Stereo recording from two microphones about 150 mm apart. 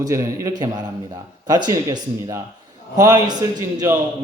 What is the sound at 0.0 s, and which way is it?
A man's voice, 20° right (ahead or behind).